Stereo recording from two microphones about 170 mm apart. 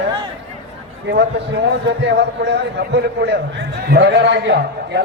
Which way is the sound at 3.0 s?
75° right (ahead or behind).